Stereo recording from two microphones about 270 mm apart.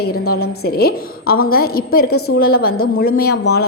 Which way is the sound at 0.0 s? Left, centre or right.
Left.